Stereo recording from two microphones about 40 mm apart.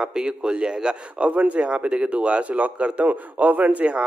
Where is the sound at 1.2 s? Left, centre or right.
Right.